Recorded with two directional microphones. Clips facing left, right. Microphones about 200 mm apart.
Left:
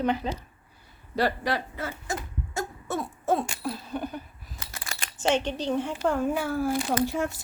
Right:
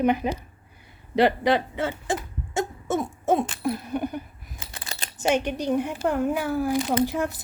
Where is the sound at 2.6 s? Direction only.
20° right (ahead or behind).